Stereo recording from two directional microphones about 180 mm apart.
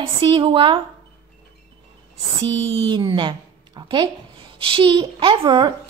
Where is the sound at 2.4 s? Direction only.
30° right (ahead or behind).